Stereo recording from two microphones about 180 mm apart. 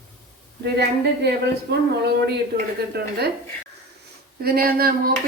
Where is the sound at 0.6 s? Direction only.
65° right (ahead or behind).